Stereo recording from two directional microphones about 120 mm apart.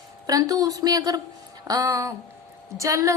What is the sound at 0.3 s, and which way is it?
A woman's voice, 30° right (ahead or behind).